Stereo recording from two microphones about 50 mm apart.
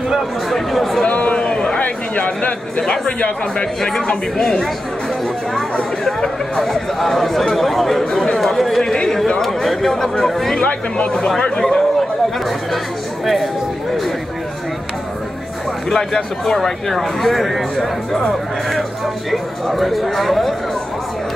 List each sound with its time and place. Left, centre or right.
0.5 s chatter: centre
1.0 s a sound: left
1.8 s a sound: left
2.8 s speech: centre
6.0 s speech: centre
10.6 s speech: left
11.6 s a sound: centre
13.2 s speech: centre
15.9 s speech: centre